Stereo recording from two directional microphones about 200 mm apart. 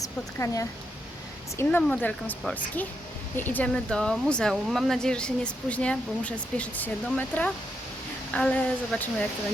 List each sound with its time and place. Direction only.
0.0 s speech: 15° left (ahead or behind)